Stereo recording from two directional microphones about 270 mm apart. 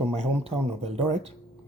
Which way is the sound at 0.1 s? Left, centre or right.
Right.